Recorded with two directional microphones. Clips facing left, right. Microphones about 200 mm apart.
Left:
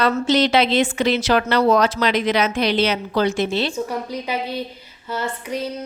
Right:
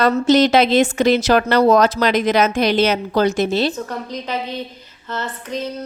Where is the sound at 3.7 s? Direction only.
10° left (ahead or behind).